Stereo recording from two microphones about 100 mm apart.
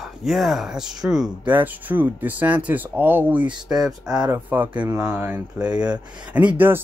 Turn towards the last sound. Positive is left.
turn(degrees=-20)  # may be behind; listen again after turning